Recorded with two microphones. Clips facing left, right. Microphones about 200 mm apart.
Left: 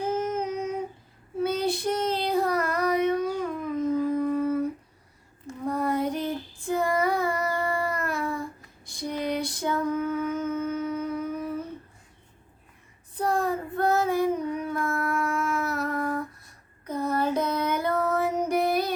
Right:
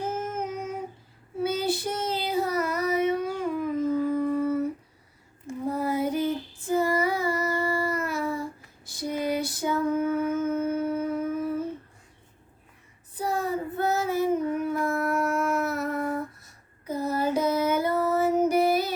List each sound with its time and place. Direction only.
0.1 s child singing: 5° right (ahead or behind)
2.9 s a sound: 5° right (ahead or behind)
4.2 s humming: 5° right (ahead or behind)
5.5 s female singing: 5° right (ahead or behind)
7.3 s child singing: 5° right (ahead or behind)
13.1 s child singing: 5° right (ahead or behind)
14.1 s howl: 5° right (ahead or behind)
16.8 s female singing: 5° right (ahead or behind)